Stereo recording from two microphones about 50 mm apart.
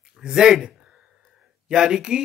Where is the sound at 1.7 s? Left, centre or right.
Centre.